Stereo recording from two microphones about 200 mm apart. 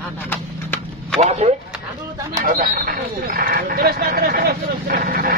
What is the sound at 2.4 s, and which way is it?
Speech, 45° right (ahead or behind).